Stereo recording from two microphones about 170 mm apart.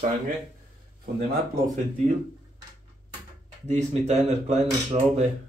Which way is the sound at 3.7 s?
40° right (ahead or behind).